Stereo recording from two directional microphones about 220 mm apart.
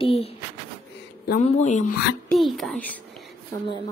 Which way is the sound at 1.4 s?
30° left (ahead or behind).